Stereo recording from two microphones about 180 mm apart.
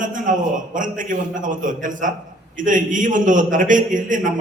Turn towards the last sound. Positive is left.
turn(degrees=-45)  # may be behind; listen again after turning